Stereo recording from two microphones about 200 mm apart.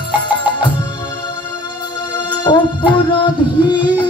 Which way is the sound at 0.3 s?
25° left (ahead or behind).